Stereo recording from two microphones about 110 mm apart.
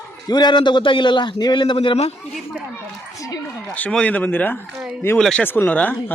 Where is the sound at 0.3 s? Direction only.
40° left (ahead or behind); by 2.1 s 60° left (ahead or behind).